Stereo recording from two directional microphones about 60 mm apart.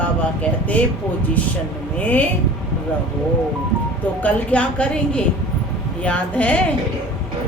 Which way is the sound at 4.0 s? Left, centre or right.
Left.